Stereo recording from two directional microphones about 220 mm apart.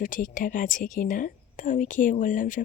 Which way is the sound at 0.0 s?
35° left (ahead or behind).